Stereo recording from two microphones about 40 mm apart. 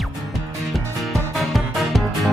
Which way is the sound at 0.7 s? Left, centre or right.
Centre.